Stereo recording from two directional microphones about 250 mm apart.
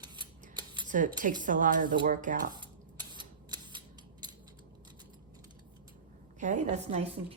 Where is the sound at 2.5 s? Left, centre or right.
Centre.